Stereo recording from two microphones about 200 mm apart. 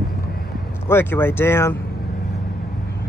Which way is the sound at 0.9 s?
10° left (ahead or behind).